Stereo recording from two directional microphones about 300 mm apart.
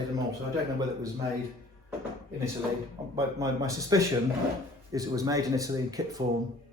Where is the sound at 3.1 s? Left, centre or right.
Centre.